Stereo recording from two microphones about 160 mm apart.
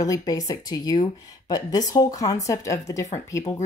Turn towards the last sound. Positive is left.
turn(degrees=20)  # may be behind; listen again after turning